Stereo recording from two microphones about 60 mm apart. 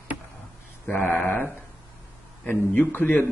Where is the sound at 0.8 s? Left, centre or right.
Left.